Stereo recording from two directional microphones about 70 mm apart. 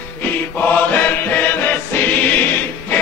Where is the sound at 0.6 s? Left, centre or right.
Left.